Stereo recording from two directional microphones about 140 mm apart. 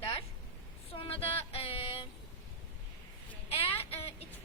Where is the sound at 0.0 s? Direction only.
40° left (ahead or behind).